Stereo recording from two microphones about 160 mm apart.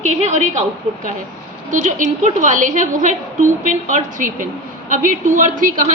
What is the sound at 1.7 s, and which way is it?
A woman's voice, 50° right (ahead or behind).